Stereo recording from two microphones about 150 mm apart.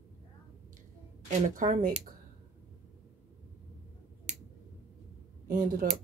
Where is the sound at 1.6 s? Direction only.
60° right (ahead or behind).